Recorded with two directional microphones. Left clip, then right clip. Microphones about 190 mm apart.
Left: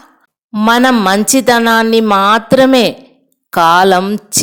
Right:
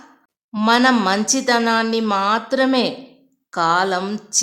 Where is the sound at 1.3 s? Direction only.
35° left (ahead or behind).